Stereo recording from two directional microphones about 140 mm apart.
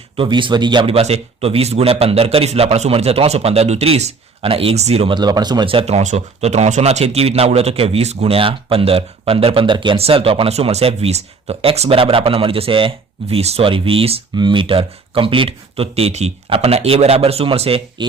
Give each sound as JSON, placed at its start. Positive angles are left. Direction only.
{"t": 0.2, "sound": "a man's voice", "side_deg": -35}